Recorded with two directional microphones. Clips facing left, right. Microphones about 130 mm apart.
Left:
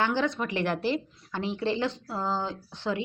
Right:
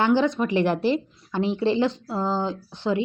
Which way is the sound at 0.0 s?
20° right (ahead or behind).